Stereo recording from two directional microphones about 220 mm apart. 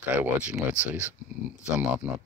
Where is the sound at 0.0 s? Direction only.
5° right (ahead or behind).